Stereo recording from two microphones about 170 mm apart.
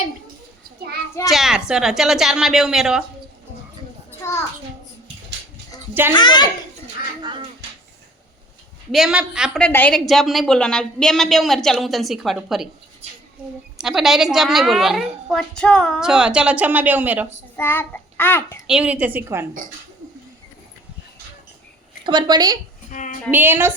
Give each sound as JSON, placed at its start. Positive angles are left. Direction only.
{"t": 1.3, "sound": "a woman's voice", "side_deg": 0}
{"t": 5.9, "sound": "a woman's voice", "side_deg": -10}
{"t": 6.1, "sound": "a child's voice", "side_deg": 25}
{"t": 7.2, "sound": "music", "side_deg": -25}
{"t": 8.9, "sound": "a woman's voice", "side_deg": 0}
{"t": 13.7, "sound": "a woman's voice", "side_deg": 0}
{"t": 17.6, "sound": "a child's voice", "side_deg": 15}
{"t": 18.7, "sound": "a woman's voice", "side_deg": -10}
{"t": 22.0, "sound": "a woman's voice", "side_deg": -25}
{"t": 22.9, "sound": "a sound", "side_deg": 50}
{"t": 23.3, "sound": "a woman's voice", "side_deg": -10}